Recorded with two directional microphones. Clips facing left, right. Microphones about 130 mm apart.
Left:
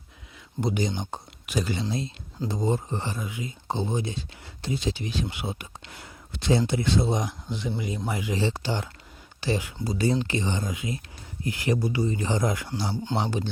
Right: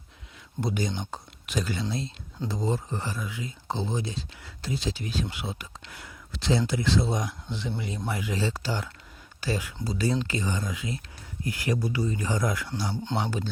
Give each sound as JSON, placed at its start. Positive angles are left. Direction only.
{"t": 0.6, "sound": "speech", "side_deg": 20}
{"t": 1.1, "sound": "a sound", "side_deg": 15}
{"t": 2.5, "sound": "speech", "side_deg": 20}
{"t": 7.8, "sound": "speech", "side_deg": 10}
{"t": 8.2, "sound": "speech", "side_deg": 20}